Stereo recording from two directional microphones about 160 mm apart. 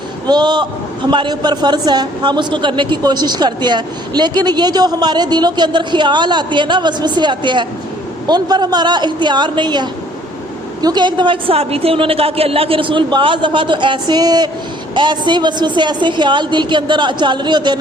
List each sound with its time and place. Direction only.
0.3 s a woman's voice: 25° right (ahead or behind)